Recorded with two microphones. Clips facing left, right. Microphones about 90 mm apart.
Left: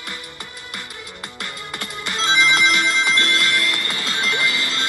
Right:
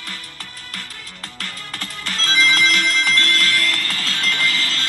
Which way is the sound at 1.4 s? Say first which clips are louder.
Left 1 dB; 15° left (ahead or behind).